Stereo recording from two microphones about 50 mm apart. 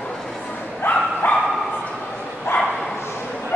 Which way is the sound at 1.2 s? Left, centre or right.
Left.